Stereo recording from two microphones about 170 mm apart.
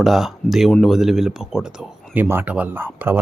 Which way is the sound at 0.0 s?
Centre (ahead or behind).